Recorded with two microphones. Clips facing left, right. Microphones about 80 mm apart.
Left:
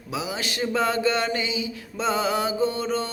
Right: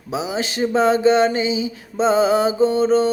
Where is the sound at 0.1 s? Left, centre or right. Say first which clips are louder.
Right 6 dB; right.